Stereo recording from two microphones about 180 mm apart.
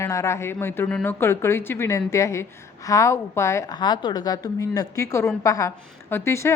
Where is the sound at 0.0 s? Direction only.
15° left (ahead or behind).